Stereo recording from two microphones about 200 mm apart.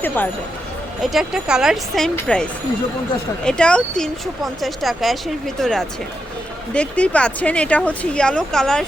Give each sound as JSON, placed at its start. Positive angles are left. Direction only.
{"t": 1.0, "sound": "speech", "side_deg": 0}